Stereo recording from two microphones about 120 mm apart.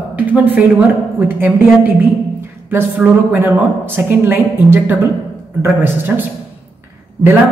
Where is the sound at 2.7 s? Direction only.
15° right (ahead or behind).